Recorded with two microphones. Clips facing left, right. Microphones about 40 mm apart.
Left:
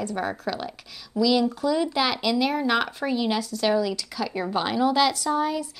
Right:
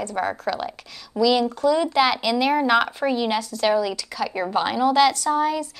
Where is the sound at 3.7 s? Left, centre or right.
Centre.